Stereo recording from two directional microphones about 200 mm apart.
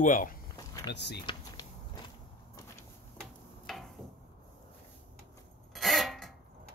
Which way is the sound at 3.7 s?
Centre (ahead or behind).